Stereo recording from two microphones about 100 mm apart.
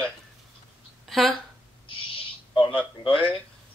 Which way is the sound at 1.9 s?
60° left (ahead or behind).